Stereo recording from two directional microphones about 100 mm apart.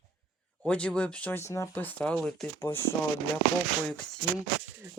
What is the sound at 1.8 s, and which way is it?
Speech, 10° left (ahead or behind).